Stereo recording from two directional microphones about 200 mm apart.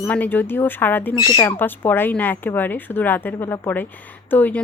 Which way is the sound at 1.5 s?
10° left (ahead or behind).